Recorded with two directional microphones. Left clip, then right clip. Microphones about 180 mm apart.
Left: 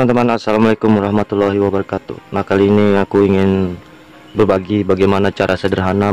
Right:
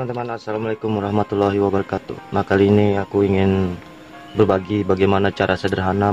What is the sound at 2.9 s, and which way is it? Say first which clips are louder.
Speech: left 6 dB; 30° left (ahead or behind).